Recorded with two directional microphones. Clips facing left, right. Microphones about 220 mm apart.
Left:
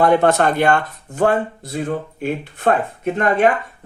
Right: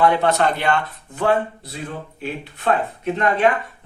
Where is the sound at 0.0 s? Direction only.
50° left (ahead or behind).